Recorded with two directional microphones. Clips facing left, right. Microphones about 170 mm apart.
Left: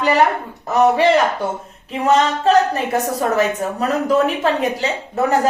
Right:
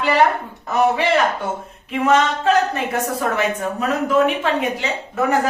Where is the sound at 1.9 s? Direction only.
35° left (ahead or behind).